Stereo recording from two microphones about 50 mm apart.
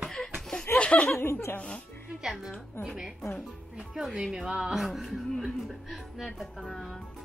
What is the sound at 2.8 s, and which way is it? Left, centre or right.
Speech, left.